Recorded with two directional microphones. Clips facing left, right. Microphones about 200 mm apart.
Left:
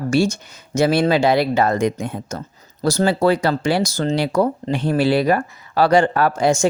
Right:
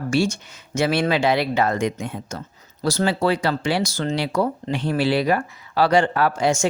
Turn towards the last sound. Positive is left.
turn(degrees=40)  # may be behind; listen again after turning